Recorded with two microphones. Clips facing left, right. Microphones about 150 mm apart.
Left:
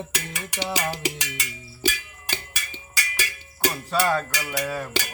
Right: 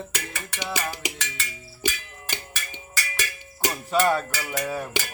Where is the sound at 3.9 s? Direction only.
15° right (ahead or behind).